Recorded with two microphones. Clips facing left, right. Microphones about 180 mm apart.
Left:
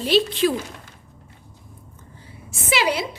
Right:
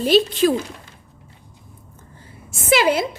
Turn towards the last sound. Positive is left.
turn(degrees=-50)  # may be behind; listen again after turning